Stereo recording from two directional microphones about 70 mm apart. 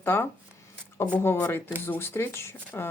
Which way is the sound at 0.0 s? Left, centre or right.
Left.